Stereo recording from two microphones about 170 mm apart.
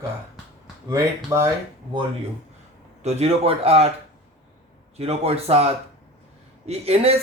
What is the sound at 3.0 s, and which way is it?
Speech, 35° right (ahead or behind).